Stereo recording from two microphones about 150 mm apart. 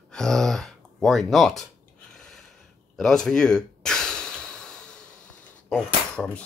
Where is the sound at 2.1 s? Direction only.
5° left (ahead or behind).